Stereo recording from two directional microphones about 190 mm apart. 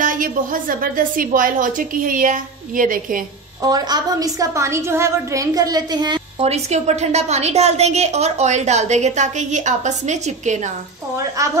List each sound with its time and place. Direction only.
0.0 s a woman's voice: 45° right (ahead or behind)
3.6 s a woman's voice: 20° right (ahead or behind); by 10.7 s 40° right (ahead or behind)
11.4 s speech: 15° right (ahead or behind)